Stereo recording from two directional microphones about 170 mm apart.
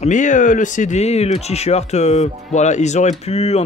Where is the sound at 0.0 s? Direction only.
45° left (ahead or behind).